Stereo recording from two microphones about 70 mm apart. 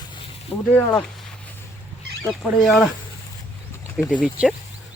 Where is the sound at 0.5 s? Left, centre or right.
Left.